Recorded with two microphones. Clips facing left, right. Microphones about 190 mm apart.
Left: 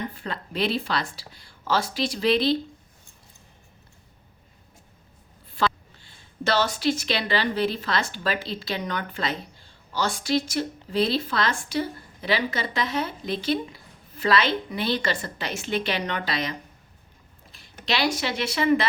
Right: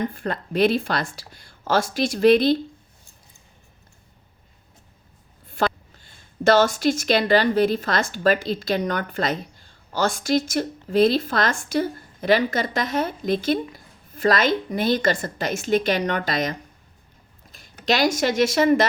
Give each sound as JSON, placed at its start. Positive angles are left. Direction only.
{"t": 0.1, "sound": "a woman's voice", "side_deg": -50}
{"t": 5.5, "sound": "a woman's voice", "side_deg": -45}